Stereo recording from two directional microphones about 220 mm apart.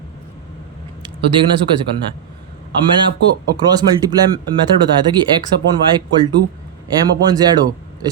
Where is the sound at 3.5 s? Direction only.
20° right (ahead or behind).